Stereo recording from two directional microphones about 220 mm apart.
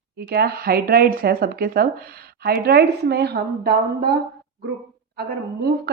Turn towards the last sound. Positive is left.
turn(degrees=-45)  # may be behind; listen again after turning